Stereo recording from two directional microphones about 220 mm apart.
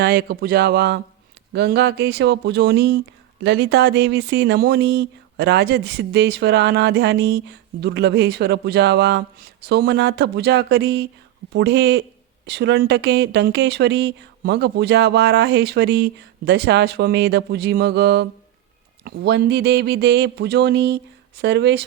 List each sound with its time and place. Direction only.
0.0 s speech: 45° right (ahead or behind)